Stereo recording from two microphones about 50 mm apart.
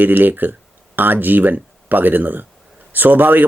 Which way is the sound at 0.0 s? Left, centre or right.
Right.